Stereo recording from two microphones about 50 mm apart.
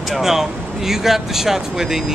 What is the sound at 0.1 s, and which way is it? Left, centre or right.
Speech, centre.